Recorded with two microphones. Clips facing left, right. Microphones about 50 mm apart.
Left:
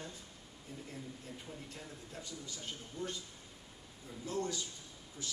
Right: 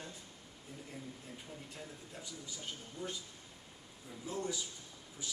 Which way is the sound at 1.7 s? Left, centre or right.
Centre.